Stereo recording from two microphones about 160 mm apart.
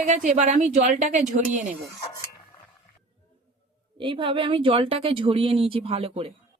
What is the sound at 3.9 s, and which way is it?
Speech, 30° right (ahead or behind).